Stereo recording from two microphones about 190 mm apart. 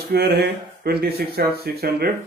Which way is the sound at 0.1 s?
55° right (ahead or behind).